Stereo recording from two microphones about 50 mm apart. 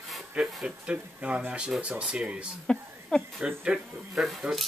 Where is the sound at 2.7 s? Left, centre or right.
Centre.